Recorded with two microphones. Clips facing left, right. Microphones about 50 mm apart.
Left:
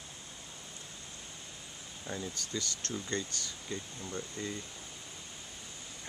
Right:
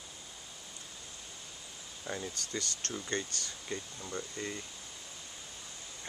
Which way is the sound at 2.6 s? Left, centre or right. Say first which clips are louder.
Even; right.